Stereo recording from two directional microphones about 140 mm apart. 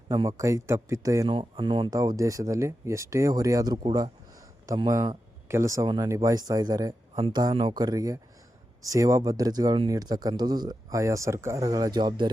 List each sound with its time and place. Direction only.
0.1 s speech: 25° right (ahead or behind)
1.3 s speech: 35° right (ahead or behind)